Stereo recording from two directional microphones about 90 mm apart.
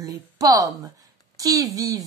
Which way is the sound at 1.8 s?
40° right (ahead or behind).